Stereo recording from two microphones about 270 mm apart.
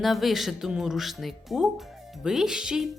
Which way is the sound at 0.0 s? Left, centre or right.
Centre.